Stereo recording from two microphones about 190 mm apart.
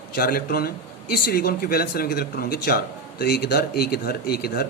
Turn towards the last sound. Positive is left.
turn(degrees=55)  # may be behind; listen again after turning